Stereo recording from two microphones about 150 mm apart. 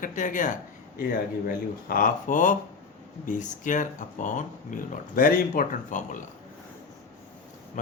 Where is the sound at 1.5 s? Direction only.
70° left (ahead or behind).